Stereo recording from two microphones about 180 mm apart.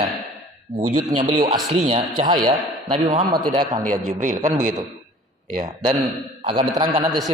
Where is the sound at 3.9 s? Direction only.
45° right (ahead or behind).